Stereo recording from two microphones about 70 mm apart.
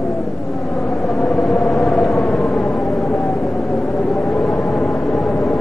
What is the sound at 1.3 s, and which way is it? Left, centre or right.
Vehicle, centre.